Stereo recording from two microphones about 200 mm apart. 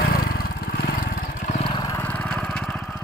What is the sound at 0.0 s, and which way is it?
Vehicle, 45° left (ahead or behind).